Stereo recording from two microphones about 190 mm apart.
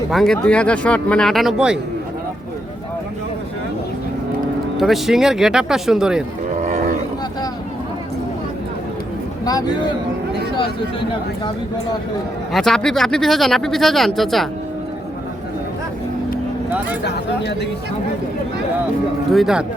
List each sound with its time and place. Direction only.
0.1 s speech: centre (ahead or behind)
4.8 s speech: centre (ahead or behind)
9.4 s a man's voice: 20° left (ahead or behind)
12.5 s speech: 5° left (ahead or behind)
16.6 s speech: 10° right (ahead or behind)
19.3 s speech: centre (ahead or behind)